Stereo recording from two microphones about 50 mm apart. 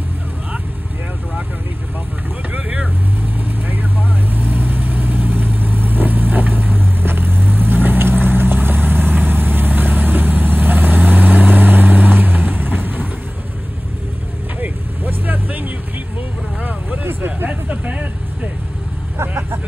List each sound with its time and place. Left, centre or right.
2.5 s vehicle: right
4.3 s vehicle: right
14.6 s vehicle: right
17.0 s vehicle: right
17.6 s vehicle: right
19.2 s vehicle: right